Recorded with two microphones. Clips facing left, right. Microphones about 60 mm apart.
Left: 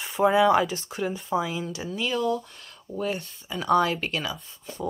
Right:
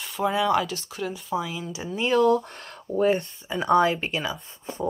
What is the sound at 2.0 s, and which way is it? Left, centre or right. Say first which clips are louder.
Speech: right 7 dB; right.